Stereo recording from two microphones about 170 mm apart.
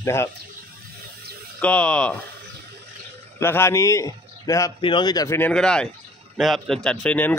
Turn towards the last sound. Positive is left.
turn(degrees=10)  # may be behind; listen again after turning